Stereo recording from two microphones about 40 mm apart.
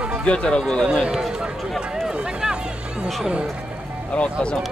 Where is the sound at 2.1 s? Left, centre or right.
Centre.